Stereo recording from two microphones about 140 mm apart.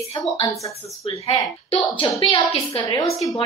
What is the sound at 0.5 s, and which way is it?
Speech, 25° left (ahead or behind).